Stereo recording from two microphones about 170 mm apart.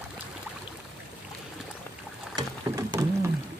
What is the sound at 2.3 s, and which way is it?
Rowboat, 20° right (ahead or behind).